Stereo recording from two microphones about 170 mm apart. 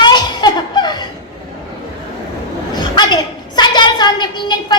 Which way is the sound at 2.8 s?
25° left (ahead or behind).